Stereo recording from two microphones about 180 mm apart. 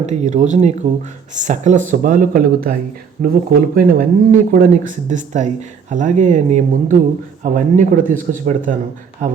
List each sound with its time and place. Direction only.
0.0 s speech: 40° right (ahead or behind)